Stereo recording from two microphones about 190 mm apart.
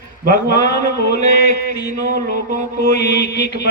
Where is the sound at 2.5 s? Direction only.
60° left (ahead or behind).